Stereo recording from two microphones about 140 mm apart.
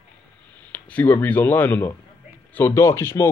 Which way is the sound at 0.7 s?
10° left (ahead or behind).